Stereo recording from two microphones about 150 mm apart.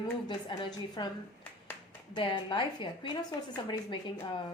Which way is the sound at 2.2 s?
30° left (ahead or behind).